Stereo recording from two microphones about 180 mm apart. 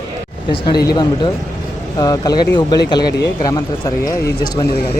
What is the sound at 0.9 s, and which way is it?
Speech, 25° left (ahead or behind).